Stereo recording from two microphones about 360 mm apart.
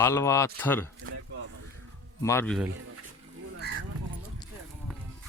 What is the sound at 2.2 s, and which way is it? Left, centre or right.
Speech, centre.